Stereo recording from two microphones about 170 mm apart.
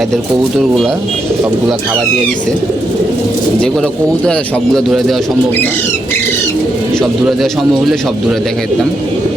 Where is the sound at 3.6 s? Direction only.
5° left (ahead or behind).